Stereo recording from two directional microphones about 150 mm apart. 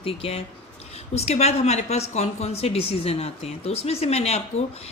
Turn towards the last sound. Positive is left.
turn(degrees=45)  # may be behind; listen again after turning